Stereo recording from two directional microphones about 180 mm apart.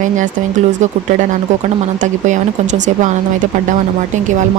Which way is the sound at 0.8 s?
40° right (ahead or behind).